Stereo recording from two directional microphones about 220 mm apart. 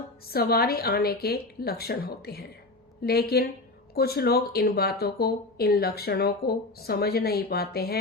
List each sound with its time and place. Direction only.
0.3 s a woman's voice: 45° left (ahead or behind)